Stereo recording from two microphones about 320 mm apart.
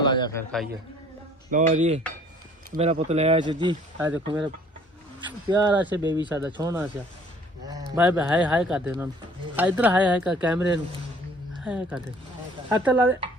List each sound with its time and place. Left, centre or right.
0.0 s a man's voice: centre
1.5 s speech: right; by 6.0 s centre
6.0 s speech: centre
6.2 s speech: centre